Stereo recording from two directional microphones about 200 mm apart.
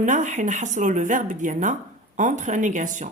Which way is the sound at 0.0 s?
40° right (ahead or behind).